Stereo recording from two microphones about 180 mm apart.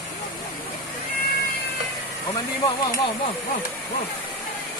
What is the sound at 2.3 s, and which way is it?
Speech, 25° left (ahead or behind).